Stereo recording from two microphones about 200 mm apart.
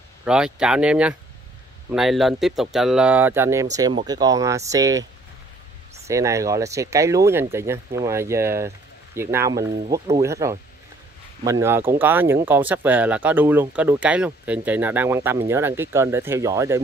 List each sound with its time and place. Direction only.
0.2 s speech: 5° right (ahead or behind)
6.0 s speech: 15° right (ahead or behind)